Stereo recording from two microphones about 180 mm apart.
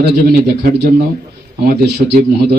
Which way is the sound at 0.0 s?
55° right (ahead or behind).